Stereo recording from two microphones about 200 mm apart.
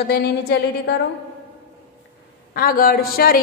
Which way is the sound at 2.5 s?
45° left (ahead or behind).